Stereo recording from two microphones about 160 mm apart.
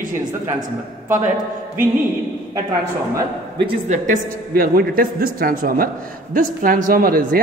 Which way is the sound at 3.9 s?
60° right (ahead or behind).